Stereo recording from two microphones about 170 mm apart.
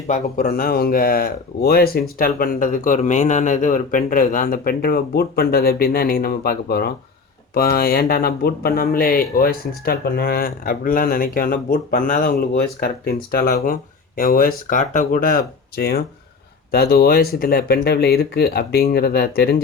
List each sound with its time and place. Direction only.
0.1 s speech: 50° left (ahead or behind)